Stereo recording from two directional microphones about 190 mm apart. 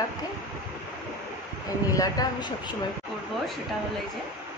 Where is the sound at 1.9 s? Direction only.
20° left (ahead or behind).